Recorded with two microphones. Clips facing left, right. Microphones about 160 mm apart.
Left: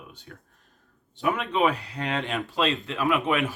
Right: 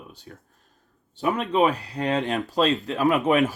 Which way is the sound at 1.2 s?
40° right (ahead or behind).